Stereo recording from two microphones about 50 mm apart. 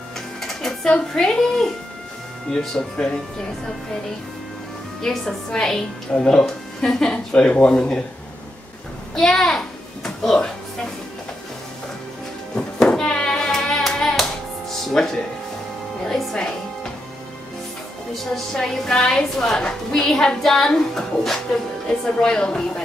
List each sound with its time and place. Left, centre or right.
0.4 s a woman's voice: centre
5.0 s a woman's voice: centre
7.3 s speech: left
9.1 s music: centre
12.5 s music: centre
13.7 s clapping: centre
14.7 s music: centre
16.1 s speech: centre
18.1 s a woman's voice: centre